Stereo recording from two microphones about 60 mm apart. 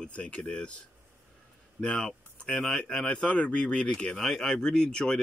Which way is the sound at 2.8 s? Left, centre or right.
Centre.